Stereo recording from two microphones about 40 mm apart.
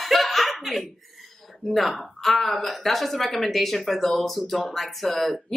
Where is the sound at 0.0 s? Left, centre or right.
Centre.